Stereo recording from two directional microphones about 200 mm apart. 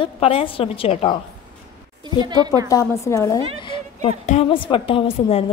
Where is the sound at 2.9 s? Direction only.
15° left (ahead or behind).